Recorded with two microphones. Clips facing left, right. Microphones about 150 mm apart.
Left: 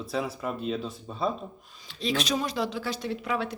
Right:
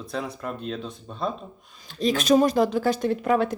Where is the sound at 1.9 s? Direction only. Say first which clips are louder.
Right 8 dB; 45° right (ahead or behind).